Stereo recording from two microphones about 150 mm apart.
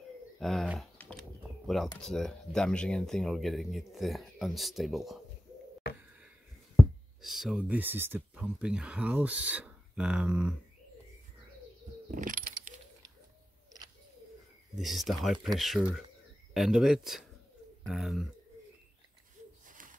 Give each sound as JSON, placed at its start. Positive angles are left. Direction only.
{"t": 0.4, "sound": "speech", "side_deg": 0}
{"t": 2.0, "sound": "speech", "side_deg": 5}
{"t": 5.9, "sound": "a sound", "side_deg": 90}
{"t": 6.8, "sound": "speech", "side_deg": 0}
{"t": 12.1, "sound": "keys jangling", "side_deg": -60}
{"t": 14.8, "sound": "speech", "side_deg": 0}
{"t": 19.6, "sound": "a sound", "side_deg": -65}